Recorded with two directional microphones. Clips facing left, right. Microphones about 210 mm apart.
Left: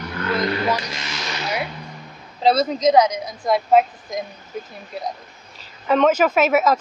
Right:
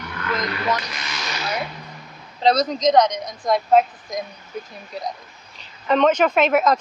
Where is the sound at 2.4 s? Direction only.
5° left (ahead or behind).